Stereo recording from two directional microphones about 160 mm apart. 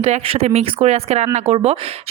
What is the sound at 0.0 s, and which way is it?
Speech, 40° right (ahead or behind).